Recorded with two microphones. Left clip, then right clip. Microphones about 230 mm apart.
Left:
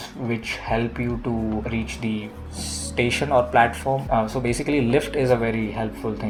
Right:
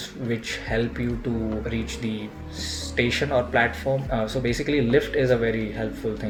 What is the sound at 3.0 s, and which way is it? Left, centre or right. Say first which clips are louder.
Speech: left 3 dB; left.